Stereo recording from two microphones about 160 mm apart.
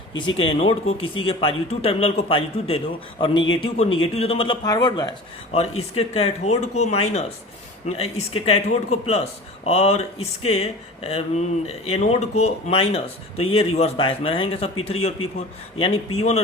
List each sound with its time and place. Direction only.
0.3 s speech: 35° left (ahead or behind)
4.6 s speech: 25° left (ahead or behind)
5.5 s speech: 40° left (ahead or behind)